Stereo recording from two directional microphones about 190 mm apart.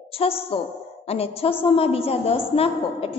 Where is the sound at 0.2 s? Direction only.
30° left (ahead or behind).